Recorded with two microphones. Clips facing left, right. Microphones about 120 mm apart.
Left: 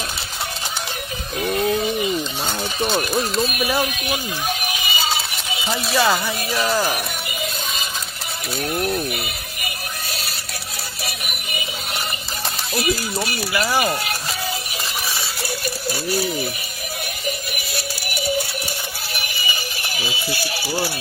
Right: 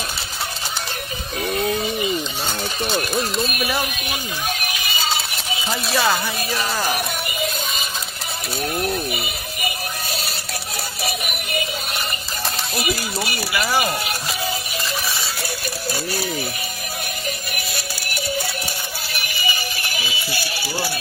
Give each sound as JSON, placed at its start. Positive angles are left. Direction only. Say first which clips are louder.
{"t": 1.5, "sound": "a sound", "louder": "left 2 dB", "side_deg": 0}
{"t": 2.9, "sound": "speech", "louder": "left 1 dB", "side_deg": 5}
{"t": 5.9, "sound": "speech", "louder": "left 2 dB", "side_deg": 0}
{"t": 8.7, "sound": "speech", "louder": "left 2 dB", "side_deg": 0}
{"t": 13.5, "sound": "speech", "louder": "left 1 dB", "side_deg": -5}